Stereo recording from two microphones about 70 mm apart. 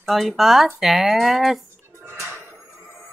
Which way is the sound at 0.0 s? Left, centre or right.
Centre.